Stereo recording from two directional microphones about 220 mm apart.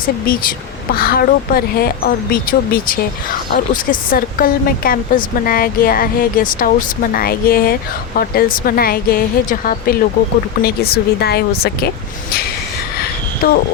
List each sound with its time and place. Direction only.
0.9 s speech: 45° left (ahead or behind)
13.4 s speech: 40° left (ahead or behind)